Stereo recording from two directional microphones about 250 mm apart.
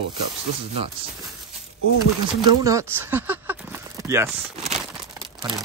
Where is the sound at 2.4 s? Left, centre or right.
Centre.